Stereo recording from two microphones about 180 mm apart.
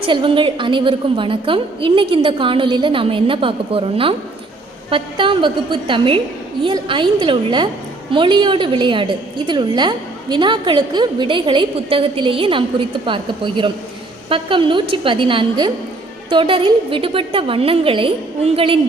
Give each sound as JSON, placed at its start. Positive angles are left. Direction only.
{"t": 0.0, "sound": "a woman's voice", "side_deg": -30}
{"t": 6.6, "sound": "a woman's voice", "side_deg": -25}